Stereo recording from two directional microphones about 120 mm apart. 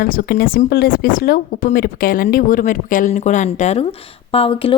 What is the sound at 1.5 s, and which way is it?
Speech, 90° left.